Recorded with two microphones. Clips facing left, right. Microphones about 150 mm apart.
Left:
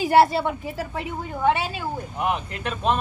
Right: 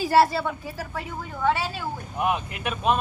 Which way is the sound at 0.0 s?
20° left (ahead or behind).